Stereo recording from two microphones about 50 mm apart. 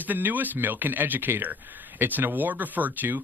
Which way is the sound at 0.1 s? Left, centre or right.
Right.